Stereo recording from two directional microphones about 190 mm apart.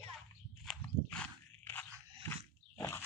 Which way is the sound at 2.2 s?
15° left (ahead or behind).